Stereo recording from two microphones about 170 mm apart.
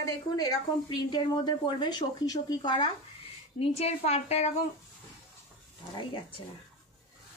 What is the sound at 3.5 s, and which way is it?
Speech, 35° left (ahead or behind).